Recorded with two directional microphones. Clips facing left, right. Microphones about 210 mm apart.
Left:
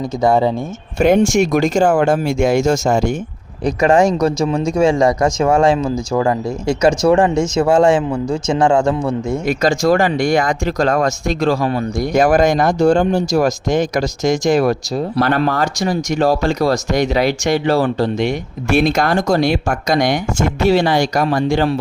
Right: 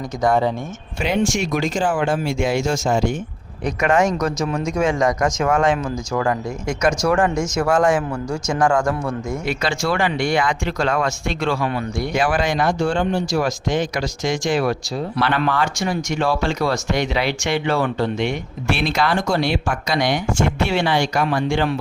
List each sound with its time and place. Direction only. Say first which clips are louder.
0.2 s speech: left 4 dB; 25° left (ahead or behind)
0.9 s speech: left 8 dB; 45° left (ahead or behind)
3.6 s speech: left 5 dB; 30° left (ahead or behind)
9.5 s speech: left 8 dB; 45° left (ahead or behind)